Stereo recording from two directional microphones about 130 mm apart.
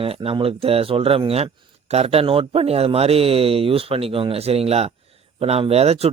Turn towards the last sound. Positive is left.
turn(degrees=-55)  # may be behind; listen again after turning